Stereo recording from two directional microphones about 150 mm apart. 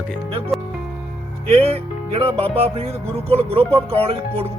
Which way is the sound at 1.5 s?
40° right (ahead or behind).